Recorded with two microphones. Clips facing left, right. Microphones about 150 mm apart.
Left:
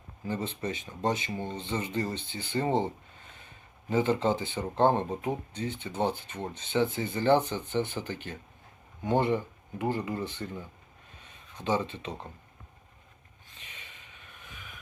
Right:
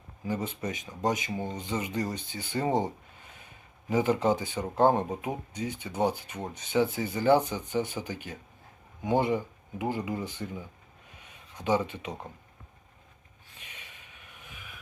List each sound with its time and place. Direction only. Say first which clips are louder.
0.6 s speech: even; 15° right (ahead or behind)
2.0 s speech: even; 25° left (ahead or behind)
2.6 s speech: even; 15° right (ahead or behind)